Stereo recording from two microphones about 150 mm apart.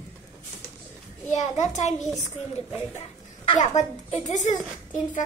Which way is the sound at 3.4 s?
35° left (ahead or behind).